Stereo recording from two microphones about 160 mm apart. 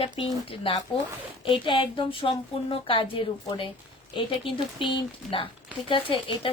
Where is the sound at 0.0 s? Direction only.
30° left (ahead or behind).